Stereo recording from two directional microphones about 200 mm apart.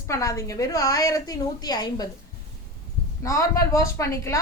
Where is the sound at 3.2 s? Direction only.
15° left (ahead or behind).